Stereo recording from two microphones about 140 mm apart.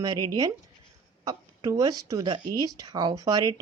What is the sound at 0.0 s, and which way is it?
Speech, 30° right (ahead or behind).